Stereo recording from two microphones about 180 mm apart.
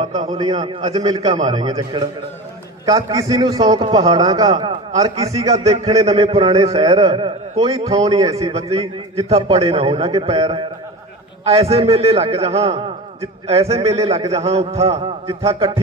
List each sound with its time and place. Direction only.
0.0 s a man's voice: 35° right (ahead or behind)
5.5 s a man's voice: 35° right (ahead or behind)